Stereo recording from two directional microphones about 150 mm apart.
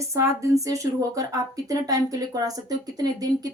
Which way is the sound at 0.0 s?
20° right (ahead or behind).